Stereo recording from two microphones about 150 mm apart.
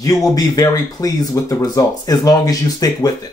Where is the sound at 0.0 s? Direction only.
25° left (ahead or behind).